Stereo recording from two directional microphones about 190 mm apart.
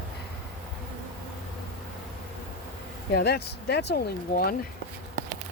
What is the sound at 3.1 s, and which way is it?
Speech, 60° left (ahead or behind).